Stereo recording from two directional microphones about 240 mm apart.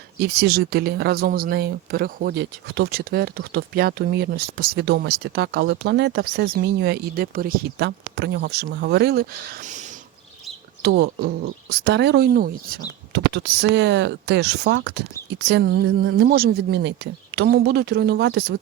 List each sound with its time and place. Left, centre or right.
0.2 s speech: right